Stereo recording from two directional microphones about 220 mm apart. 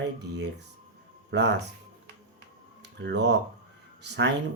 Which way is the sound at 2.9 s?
50° right (ahead or behind).